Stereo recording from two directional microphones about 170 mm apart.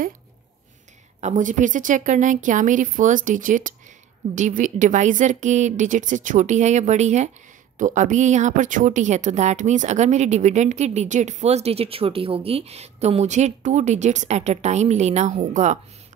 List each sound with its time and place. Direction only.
1.2 s speech: 50° right (ahead or behind)